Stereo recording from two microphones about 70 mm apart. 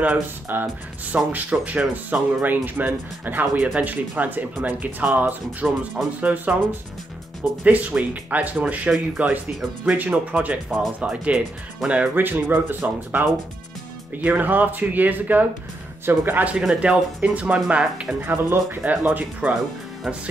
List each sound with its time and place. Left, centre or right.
0.0 s speech: right
12.2 s speech: right
16.5 s speech: centre
18.2 s speech: right